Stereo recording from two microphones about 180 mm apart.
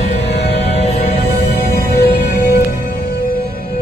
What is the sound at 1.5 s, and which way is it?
Music, 60° left (ahead or behind).